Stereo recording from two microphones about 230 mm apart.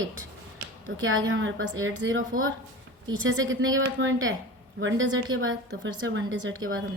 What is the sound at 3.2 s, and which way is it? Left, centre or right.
A woman's voice, right.